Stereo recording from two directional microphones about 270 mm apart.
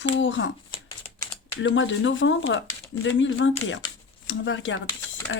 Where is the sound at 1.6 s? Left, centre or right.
Left.